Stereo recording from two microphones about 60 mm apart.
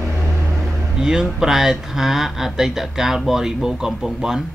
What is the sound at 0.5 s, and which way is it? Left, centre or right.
Speech, centre.